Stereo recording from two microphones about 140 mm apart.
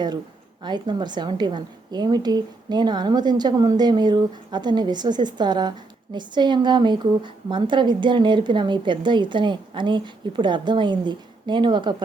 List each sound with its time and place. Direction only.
0.6 s a woman's voice: 35° right (ahead or behind)